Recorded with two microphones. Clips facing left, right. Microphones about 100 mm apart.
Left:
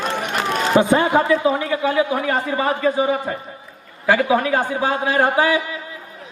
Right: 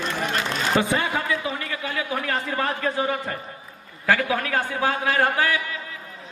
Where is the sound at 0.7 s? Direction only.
20° left (ahead or behind).